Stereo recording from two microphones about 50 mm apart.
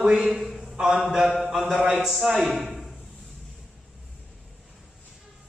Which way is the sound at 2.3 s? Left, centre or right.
Centre.